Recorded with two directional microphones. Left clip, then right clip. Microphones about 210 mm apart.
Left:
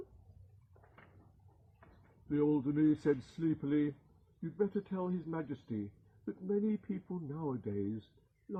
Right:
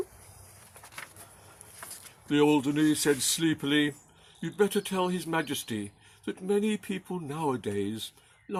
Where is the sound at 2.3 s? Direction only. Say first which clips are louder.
Right 9 dB; 40° right (ahead or behind).